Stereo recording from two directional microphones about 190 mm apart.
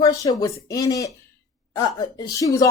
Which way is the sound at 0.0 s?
20° left (ahead or behind).